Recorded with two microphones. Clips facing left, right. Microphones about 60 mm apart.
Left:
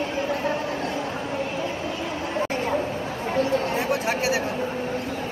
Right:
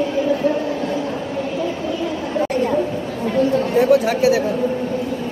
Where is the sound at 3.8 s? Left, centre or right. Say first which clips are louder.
Right 10 dB; left.